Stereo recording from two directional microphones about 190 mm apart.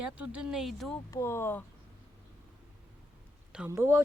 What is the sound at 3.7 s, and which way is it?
Speech, 15° right (ahead or behind).